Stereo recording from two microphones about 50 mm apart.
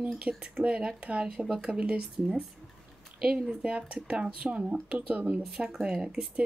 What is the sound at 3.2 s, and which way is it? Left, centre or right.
Speech, centre.